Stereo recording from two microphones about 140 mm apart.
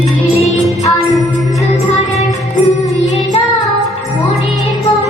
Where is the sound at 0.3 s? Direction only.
50° left (ahead or behind).